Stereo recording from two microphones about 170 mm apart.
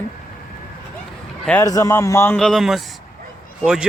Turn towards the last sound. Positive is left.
turn(degrees=-5)  # may be behind; listen again after turning